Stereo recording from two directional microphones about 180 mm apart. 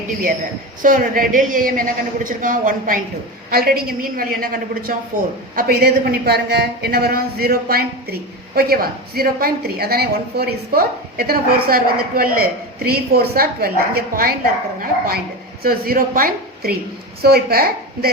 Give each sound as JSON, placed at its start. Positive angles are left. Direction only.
{"t": 0.8, "sound": "a woman's voice", "side_deg": -50}